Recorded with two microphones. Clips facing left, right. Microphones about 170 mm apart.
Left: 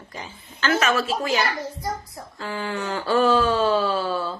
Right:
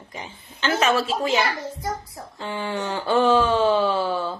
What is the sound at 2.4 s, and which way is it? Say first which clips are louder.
Speech: right 1 dB; 25° right (ahead or behind).